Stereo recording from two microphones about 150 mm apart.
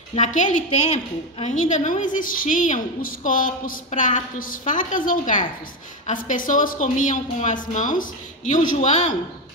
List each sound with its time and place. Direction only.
0.1 s a woman's voice: 55° left (ahead or behind)